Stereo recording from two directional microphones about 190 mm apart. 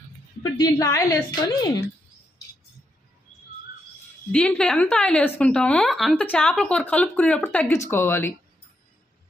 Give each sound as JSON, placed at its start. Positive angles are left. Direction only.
{"t": 0.4, "sound": "a woman's voice", "side_deg": 20}
{"t": 4.3, "sound": "a woman's voice", "side_deg": 5}